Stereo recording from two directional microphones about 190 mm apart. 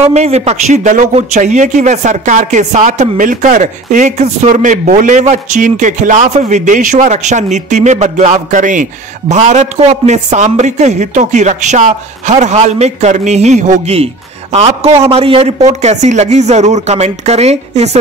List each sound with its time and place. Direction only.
0.0 s a man's voice: 35° right (ahead or behind)